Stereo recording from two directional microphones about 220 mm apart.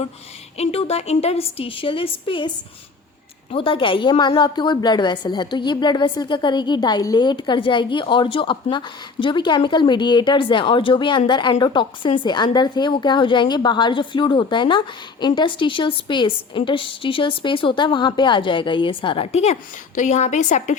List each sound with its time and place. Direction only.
0.5 s a woman's voice: 25° left (ahead or behind)
3.5 s a woman's voice: 25° left (ahead or behind)